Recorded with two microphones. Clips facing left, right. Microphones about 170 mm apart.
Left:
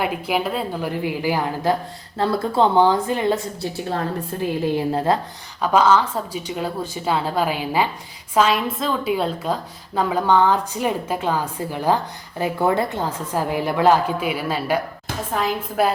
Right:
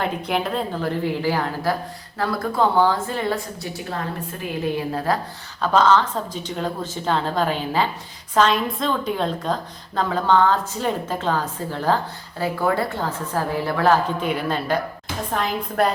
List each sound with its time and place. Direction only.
0.0 s a woman's voice: 5° left (ahead or behind)
2.1 s a woman's voice: 25° left (ahead or behind)
4.9 s a woman's voice: 25° left (ahead or behind)
5.7 s a woman's voice: 10° left (ahead or behind)